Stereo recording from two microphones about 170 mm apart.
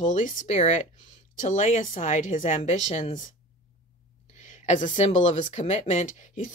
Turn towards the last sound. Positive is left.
turn(degrees=45)  # may be behind; listen again after turning